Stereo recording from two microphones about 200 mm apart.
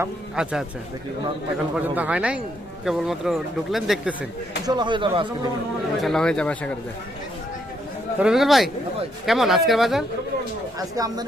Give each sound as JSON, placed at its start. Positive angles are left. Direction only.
{"t": 0.0, "sound": "speech", "side_deg": -5}
{"t": 1.7, "sound": "speech", "side_deg": -5}
{"t": 4.6, "sound": "speech", "side_deg": -20}
{"t": 6.0, "sound": "speech", "side_deg": 0}
{"t": 8.2, "sound": "speech", "side_deg": 0}
{"t": 10.8, "sound": "speech", "side_deg": -20}